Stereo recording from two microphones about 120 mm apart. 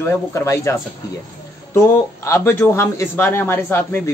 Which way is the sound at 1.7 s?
25° left (ahead or behind).